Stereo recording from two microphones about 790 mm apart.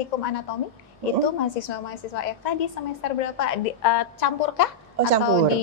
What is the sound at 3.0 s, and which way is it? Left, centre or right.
A woman's voice, left.